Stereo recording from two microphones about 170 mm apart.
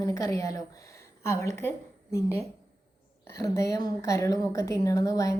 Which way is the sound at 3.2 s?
20° left (ahead or behind).